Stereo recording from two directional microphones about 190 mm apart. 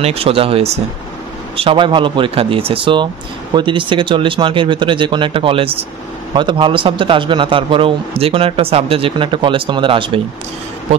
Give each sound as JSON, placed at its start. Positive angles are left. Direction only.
{"t": 0.0, "sound": "a man's voice", "side_deg": -30}